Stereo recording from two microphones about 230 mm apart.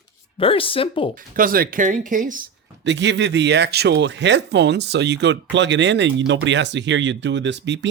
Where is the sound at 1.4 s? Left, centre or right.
Right.